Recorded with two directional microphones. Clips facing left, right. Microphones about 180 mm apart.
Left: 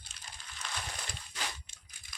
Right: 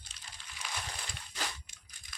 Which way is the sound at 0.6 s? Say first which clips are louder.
Even; 10° right (ahead or behind).